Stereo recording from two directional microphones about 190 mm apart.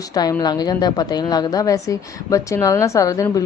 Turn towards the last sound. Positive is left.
turn(degrees=15)  # may be behind; listen again after turning